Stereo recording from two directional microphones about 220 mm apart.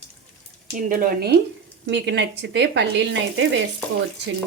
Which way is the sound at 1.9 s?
55° right (ahead or behind).